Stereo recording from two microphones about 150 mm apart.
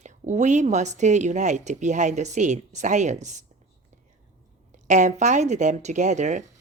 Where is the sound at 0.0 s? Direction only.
55° right (ahead or behind).